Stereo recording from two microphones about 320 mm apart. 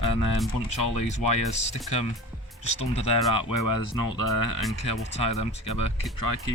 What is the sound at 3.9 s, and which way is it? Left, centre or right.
Speech, left.